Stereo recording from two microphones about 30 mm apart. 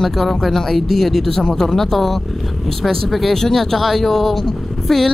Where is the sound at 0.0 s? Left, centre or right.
Centre.